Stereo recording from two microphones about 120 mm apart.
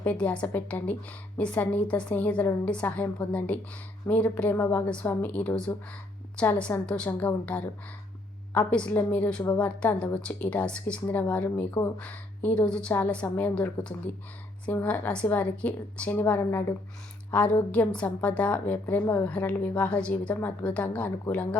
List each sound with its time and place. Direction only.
0.0 s a woman's voice: 15° left (ahead or behind)